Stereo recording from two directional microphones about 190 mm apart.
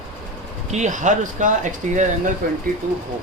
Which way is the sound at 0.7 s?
40° right (ahead or behind).